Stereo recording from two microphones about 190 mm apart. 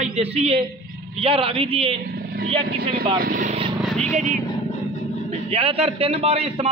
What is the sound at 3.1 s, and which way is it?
Speech, 50° right (ahead or behind).